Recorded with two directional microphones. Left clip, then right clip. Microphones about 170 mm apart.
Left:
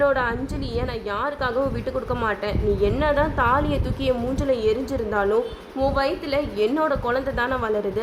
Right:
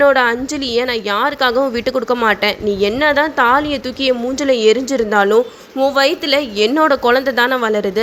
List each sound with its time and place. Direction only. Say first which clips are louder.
0.0 s a woman's voice: right 9 dB; 25° right (ahead or behind)